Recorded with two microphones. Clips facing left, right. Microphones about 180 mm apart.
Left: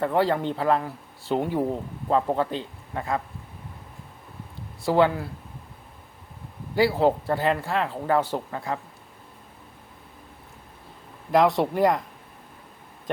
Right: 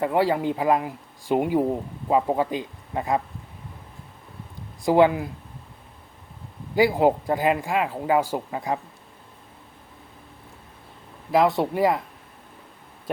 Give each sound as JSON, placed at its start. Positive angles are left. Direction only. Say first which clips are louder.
{"t": 0.0, "sound": "speech", "louder": "right 1 dB", "side_deg": -10}
{"t": 4.8, "sound": "speech", "louder": "right 3 dB", "side_deg": -15}
{"t": 6.7, "sound": "speech", "louder": "right 2 dB", "side_deg": -15}
{"t": 11.3, "sound": "speech", "louder": "even", "side_deg": 0}